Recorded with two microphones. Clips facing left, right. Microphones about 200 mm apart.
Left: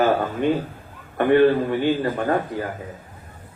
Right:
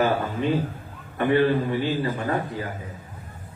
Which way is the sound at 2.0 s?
50° left (ahead or behind).